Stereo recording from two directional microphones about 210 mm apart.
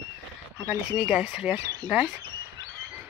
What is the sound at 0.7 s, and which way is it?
Speech, 5° right (ahead or behind).